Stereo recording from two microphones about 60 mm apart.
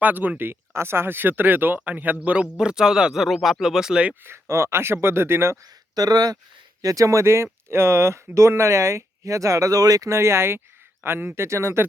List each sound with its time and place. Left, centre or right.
0.0 s speech: right; by 4.1 s centre
4.2 s speech: right
6.0 s speech: right
6.8 s speech: right
10.1 s speech: right
11.4 s speech: right